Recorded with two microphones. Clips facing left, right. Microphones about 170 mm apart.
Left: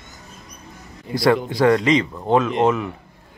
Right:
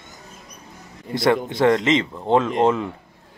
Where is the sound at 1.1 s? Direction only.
20° right (ahead or behind).